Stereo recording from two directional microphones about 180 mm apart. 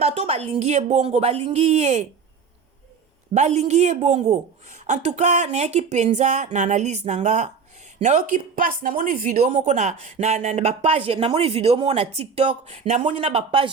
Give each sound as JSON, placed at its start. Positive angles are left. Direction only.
{"t": 0.0, "sound": "speech", "side_deg": -35}
{"t": 3.3, "sound": "speech", "side_deg": -40}